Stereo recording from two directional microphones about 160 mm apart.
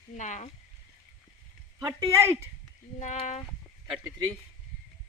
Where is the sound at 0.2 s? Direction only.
50° left (ahead or behind).